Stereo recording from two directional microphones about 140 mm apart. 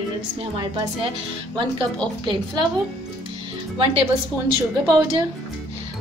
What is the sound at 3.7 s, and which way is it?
Speech, 45° right (ahead or behind).